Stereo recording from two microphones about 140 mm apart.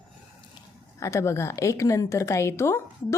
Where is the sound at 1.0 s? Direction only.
20° left (ahead or behind).